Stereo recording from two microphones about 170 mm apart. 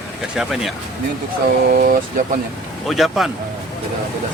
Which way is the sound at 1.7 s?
60° right (ahead or behind).